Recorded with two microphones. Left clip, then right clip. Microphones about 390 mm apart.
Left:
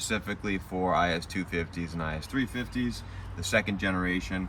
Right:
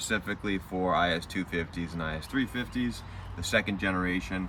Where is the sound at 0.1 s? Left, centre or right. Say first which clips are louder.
Right 2 dB; centre.